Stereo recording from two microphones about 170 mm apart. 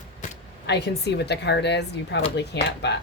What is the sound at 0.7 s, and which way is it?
Speech, 80° left.